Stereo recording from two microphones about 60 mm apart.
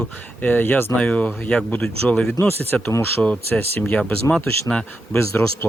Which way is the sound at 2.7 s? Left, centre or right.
Centre.